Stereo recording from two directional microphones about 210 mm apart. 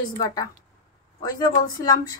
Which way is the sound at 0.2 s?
15° left (ahead or behind).